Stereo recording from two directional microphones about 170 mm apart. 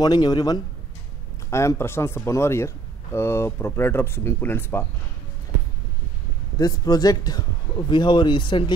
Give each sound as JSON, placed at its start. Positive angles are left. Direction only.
{"t": 0.0, "sound": "a man's voice", "side_deg": 25}
{"t": 6.6, "sound": "a man's voice", "side_deg": 25}